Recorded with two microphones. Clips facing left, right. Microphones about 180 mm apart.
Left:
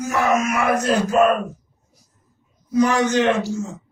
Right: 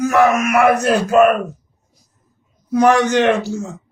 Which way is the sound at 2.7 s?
60° right (ahead or behind).